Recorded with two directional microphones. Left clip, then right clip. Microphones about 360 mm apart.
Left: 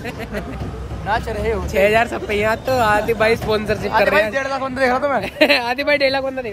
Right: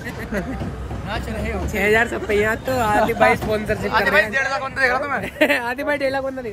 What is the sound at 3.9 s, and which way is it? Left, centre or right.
A man's voice, left.